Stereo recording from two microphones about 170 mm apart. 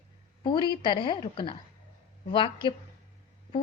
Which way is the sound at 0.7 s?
30° left (ahead or behind).